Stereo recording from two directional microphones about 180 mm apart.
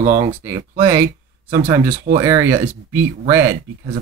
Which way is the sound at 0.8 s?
15° right (ahead or behind).